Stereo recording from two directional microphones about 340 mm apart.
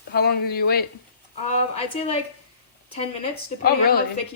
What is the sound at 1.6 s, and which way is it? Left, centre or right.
A woman's voice, centre.